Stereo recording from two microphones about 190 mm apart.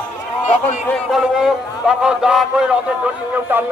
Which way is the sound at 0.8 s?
Centre (ahead or behind).